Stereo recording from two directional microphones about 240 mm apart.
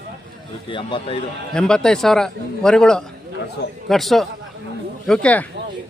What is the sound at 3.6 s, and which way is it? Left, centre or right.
Speech, left.